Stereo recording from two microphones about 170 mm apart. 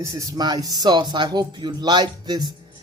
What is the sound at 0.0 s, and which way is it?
Speech, 20° right (ahead or behind).